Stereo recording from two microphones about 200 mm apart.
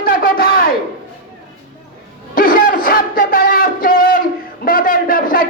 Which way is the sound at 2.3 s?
45° left (ahead or behind).